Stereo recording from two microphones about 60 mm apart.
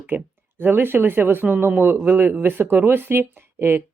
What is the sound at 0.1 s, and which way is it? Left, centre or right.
Speech, right.